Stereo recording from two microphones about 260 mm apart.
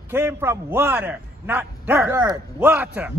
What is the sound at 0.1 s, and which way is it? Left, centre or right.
A man's voice, centre.